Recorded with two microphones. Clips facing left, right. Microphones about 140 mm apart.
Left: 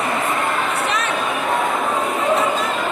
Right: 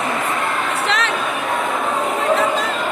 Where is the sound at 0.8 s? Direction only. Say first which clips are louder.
Right 1 dB; 90° right.